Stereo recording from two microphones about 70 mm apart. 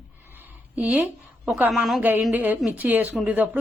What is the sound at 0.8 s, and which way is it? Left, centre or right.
Speech, right.